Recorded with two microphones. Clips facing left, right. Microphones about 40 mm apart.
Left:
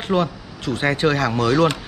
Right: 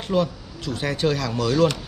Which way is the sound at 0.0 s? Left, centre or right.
Left.